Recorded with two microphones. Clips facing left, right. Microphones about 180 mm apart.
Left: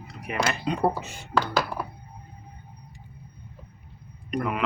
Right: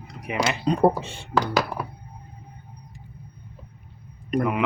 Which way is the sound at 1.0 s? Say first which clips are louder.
Right 2 dB; 30° right (ahead or behind).